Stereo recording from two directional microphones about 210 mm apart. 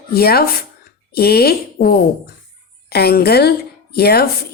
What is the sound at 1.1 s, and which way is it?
A woman's voice, 50° left (ahead or behind).